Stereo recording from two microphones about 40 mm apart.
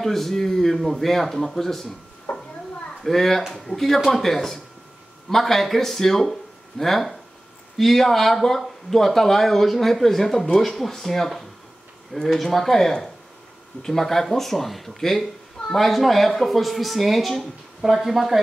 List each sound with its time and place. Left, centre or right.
0.0 s speech: centre
2.3 s a sound: left
3.0 s speech: centre